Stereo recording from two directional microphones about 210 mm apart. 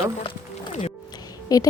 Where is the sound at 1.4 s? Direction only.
15° left (ahead or behind).